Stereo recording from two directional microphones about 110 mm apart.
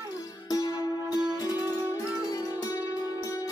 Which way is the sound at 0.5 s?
35° left (ahead or behind).